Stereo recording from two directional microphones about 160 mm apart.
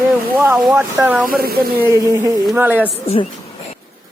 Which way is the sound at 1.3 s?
70° right (ahead or behind).